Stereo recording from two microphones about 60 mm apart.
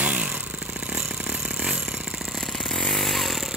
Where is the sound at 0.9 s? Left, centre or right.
Centre.